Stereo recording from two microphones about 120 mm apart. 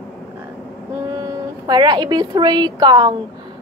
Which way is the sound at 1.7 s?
35° right (ahead or behind).